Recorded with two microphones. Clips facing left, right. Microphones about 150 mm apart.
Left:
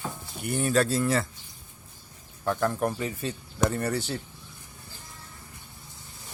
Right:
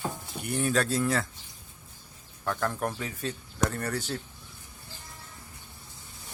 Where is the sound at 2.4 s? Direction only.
10° left (ahead or behind).